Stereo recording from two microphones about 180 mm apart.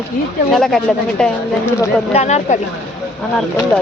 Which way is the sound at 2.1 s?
40° left (ahead or behind).